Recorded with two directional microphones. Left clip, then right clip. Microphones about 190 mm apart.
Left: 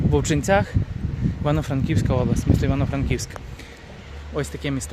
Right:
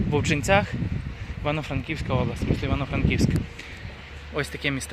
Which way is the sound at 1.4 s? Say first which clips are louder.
Left 3 dB; 30° left (ahead or behind).